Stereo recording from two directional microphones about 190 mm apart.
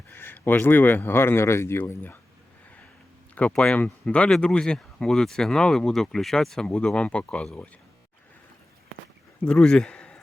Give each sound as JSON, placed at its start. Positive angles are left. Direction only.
{"t": 0.1, "sound": "speech", "side_deg": 10}
{"t": 3.3, "sound": "speech", "side_deg": 5}
{"t": 9.4, "sound": "a man's voice", "side_deg": 5}